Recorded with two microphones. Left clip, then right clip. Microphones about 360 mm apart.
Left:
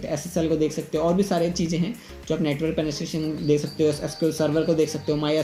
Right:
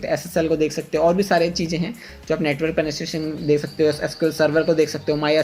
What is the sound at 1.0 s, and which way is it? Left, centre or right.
Speech, right.